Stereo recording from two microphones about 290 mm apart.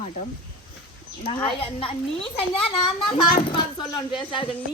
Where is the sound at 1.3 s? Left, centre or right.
Centre.